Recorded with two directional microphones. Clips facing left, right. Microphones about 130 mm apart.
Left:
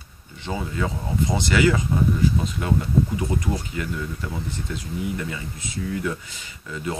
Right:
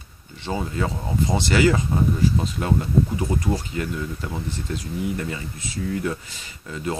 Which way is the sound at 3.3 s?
5° right (ahead or behind).